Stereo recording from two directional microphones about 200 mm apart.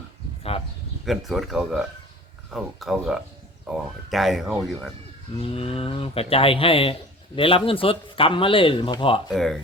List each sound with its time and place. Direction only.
1.0 s speech: centre (ahead or behind)
5.3 s speech: 30° left (ahead or behind)
9.3 s speech: centre (ahead or behind)